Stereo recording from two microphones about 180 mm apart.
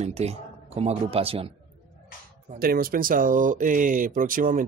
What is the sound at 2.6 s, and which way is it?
Speech, 55° right (ahead or behind).